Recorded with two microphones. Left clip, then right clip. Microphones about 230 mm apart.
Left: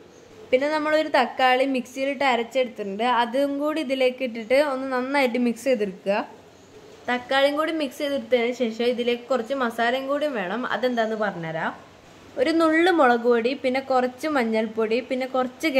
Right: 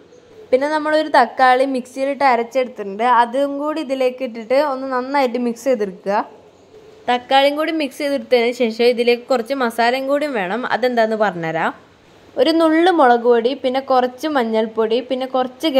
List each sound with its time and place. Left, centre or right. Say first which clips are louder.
0.5 s a woman's voice: right 5 dB; centre; by 11.7 s right
12.4 s a woman's voice: right 6 dB; centre